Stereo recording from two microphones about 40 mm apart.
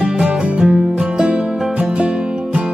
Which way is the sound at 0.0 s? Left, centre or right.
Right.